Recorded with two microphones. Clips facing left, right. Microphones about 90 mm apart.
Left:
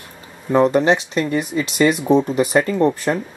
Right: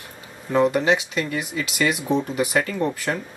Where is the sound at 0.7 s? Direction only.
30° left (ahead or behind).